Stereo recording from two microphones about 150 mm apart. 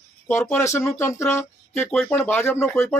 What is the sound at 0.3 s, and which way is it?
Speech, 15° left (ahead or behind).